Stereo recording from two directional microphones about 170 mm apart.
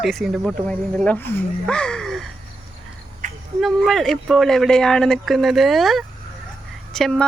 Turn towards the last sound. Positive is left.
turn(degrees=5)  # may be behind; listen again after turning